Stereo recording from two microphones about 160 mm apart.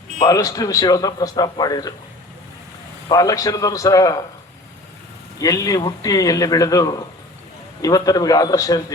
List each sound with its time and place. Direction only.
0.2 s a man's voice: 20° left (ahead or behind)
3.1 s a man's voice: 20° left (ahead or behind)
5.4 s a man's voice: 20° left (ahead or behind)